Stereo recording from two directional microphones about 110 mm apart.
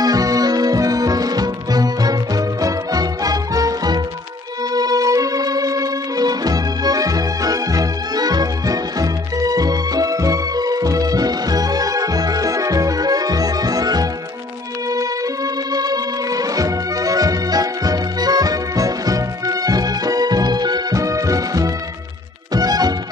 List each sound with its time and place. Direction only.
0.0 s music: 35° right (ahead or behind)
15.7 s music: 35° right (ahead or behind)